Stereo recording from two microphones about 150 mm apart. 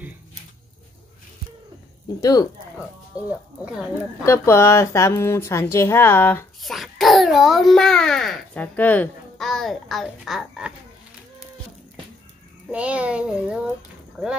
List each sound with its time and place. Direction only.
2.1 s speech: 25° left (ahead or behind)
3.3 s speech: 5° right (ahead or behind)
4.2 s a woman's voice: 15° left (ahead or behind)
6.6 s a child's voice: centre (ahead or behind)
12.7 s a child's voice: 10° right (ahead or behind)